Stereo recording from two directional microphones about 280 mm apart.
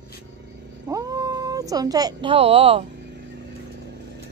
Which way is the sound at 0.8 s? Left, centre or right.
Centre.